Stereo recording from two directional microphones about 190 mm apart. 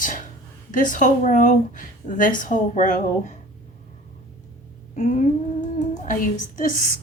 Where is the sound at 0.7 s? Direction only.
45° left (ahead or behind).